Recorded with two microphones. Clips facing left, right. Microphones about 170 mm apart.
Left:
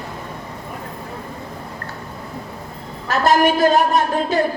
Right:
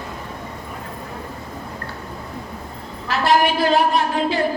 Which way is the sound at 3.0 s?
45° left (ahead or behind).